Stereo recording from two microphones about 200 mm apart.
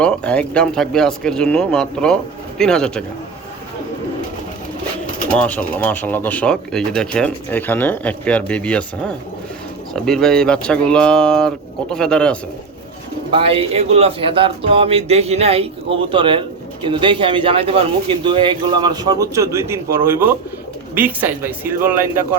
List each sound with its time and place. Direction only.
0.0 s speech: 5° left (ahead or behind)
5.3 s speech: 5° left (ahead or behind)
13.3 s speech: 30° right (ahead or behind); by 22.4 s 10° right (ahead or behind)